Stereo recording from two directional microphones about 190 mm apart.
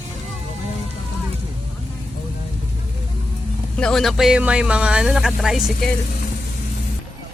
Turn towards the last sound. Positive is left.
turn(degrees=0)  # may be behind; listen again after turning